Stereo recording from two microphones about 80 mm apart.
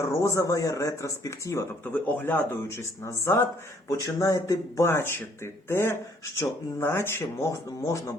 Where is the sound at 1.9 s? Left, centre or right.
Left.